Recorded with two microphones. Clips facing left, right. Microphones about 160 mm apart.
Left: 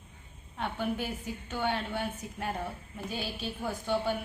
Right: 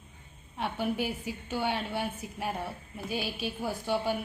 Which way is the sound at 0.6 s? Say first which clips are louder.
Right 2 dB; 10° right (ahead or behind).